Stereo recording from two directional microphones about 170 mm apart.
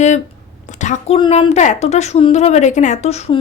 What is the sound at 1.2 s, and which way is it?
A woman's voice, 40° left (ahead or behind).